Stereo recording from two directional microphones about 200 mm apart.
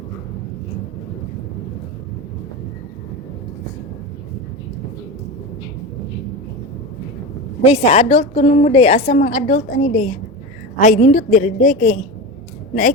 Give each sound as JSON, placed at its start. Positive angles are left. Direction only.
{"t": 7.6, "sound": "a woman's voice", "side_deg": 30}